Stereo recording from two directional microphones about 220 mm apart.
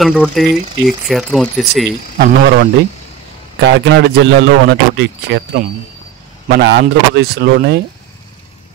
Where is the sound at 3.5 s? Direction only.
55° right (ahead or behind).